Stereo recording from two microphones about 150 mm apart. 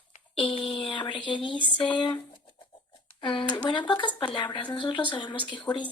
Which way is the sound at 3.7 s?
30° left (ahead or behind).